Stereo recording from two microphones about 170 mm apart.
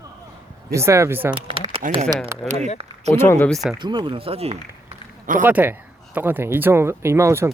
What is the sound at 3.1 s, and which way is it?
Speech, 15° left (ahead or behind).